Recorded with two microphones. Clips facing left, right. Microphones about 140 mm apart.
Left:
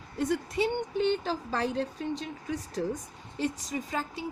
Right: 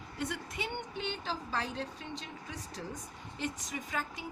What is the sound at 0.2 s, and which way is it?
A woman's voice, 35° left (ahead or behind).